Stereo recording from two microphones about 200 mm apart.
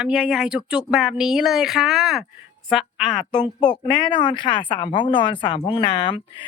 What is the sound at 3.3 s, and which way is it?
Speech, 20° left (ahead or behind).